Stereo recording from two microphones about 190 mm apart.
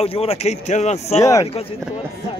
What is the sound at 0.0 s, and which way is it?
Speech, 30° left (ahead or behind).